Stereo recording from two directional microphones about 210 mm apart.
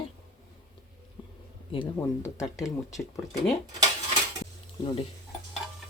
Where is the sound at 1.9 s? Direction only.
15° left (ahead or behind).